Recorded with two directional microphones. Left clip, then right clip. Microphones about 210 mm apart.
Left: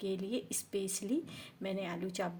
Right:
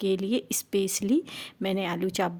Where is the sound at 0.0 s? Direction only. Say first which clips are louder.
Right 11 dB; 40° right (ahead or behind).